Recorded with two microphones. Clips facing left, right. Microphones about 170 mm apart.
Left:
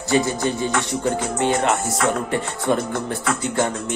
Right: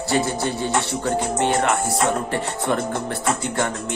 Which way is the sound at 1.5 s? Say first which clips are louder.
Left 2 dB; 20° left (ahead or behind).